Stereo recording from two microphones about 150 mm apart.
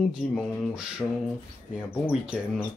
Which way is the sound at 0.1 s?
5° right (ahead or behind).